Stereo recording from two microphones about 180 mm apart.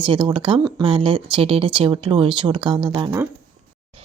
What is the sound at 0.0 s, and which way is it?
Speech, 25° right (ahead or behind).